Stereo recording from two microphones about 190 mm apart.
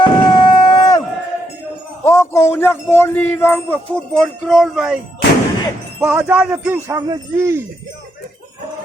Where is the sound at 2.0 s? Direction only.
15° left (ahead or behind); by 5.0 s 5° right (ahead or behind).